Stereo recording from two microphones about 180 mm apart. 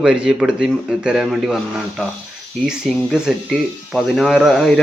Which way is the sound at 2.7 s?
Centre (ahead or behind).